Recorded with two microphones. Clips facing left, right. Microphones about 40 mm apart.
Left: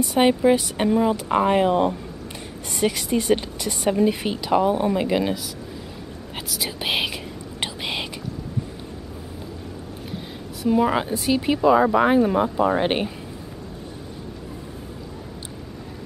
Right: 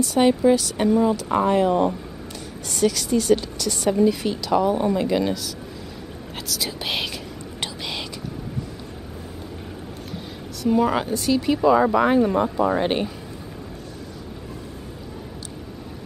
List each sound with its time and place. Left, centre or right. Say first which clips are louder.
0.0 s speech: even; left
7.6 s whispering: left 3 dB; left
10.7 s speech: even; centre